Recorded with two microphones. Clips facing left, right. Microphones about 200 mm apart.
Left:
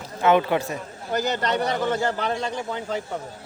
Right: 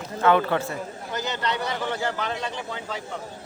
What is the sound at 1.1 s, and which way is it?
A man's voice, 45° left (ahead or behind).